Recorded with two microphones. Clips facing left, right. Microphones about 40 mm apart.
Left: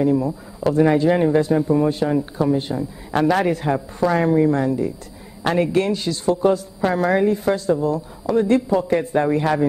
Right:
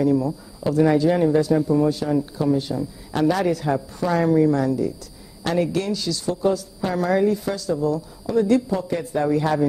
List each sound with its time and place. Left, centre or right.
0.0 s speech: left